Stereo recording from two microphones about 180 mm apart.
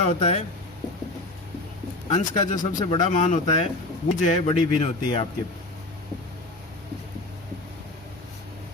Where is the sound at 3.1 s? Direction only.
45° left (ahead or behind).